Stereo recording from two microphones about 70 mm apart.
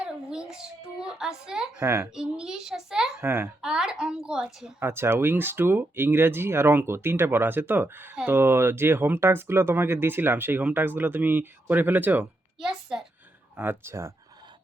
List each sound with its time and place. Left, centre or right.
0.0 s child singing: centre
0.9 s a woman's voice: centre
1.8 s speech: right
2.0 s a woman's voice: centre
3.2 s speech: right
3.6 s a woman's voice: centre
4.8 s speech: right
12.5 s a sound: centre
13.6 s speech: right